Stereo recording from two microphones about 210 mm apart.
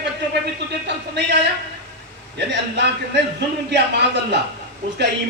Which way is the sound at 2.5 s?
55° right (ahead or behind).